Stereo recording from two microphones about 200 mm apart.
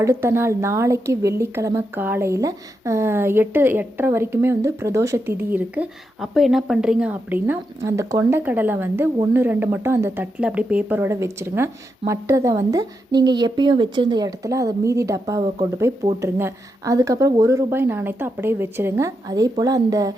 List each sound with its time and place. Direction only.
0.0 s speech: 15° right (ahead or behind)